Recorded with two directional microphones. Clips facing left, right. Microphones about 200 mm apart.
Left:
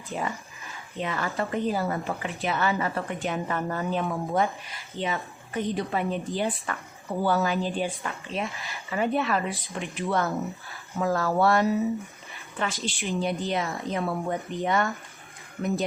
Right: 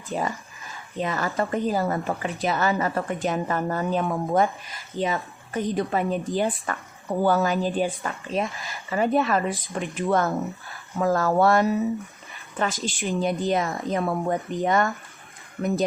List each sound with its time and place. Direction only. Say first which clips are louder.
0.1 s a woman's voice: right 4 dB; 40° right (ahead or behind)